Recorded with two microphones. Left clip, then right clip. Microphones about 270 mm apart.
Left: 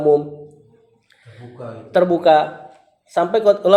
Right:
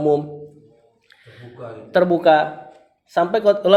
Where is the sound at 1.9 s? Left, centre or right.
Right.